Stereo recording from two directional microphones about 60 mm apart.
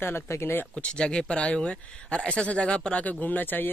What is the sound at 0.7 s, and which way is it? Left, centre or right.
Speech, centre.